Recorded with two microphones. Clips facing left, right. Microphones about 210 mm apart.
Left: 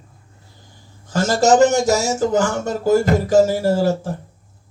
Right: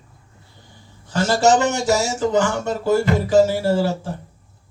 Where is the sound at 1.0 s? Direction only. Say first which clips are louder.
Left 1 dB; 40° left (ahead or behind).